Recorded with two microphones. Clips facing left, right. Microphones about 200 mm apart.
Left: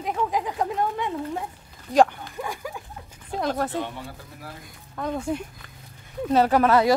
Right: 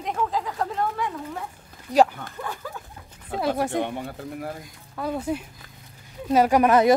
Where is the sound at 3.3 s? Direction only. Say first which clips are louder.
Right 1 dB; 10° right (ahead or behind).